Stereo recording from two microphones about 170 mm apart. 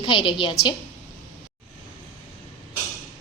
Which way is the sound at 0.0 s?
30° left (ahead or behind).